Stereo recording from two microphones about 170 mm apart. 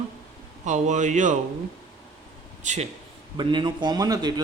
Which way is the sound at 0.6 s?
45° right (ahead or behind).